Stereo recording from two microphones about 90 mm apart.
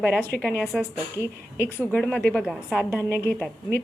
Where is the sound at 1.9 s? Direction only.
20° left (ahead or behind).